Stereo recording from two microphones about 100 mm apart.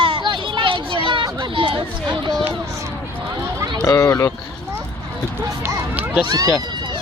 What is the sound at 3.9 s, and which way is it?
Speech, 30° left (ahead or behind).